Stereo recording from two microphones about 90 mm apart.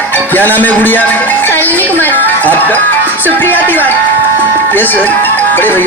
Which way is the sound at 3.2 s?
20° left (ahead or behind).